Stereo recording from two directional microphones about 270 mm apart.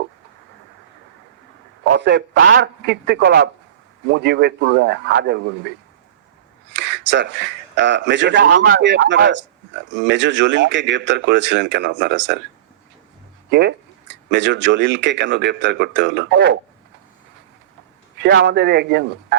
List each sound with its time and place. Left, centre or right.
1.9 s speech: right
8.5 s speech: right
13.5 s speech: right
18.2 s speech: right